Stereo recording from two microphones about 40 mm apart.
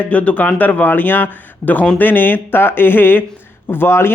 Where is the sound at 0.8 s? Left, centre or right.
Left.